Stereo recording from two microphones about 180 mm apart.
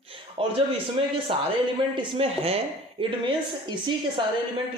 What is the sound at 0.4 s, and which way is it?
Speech, 30° right (ahead or behind).